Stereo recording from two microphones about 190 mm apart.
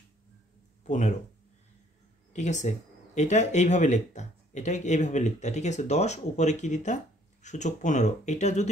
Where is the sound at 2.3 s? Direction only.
40° left (ahead or behind).